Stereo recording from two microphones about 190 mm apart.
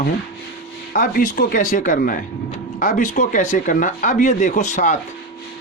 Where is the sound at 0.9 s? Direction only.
45° left (ahead or behind).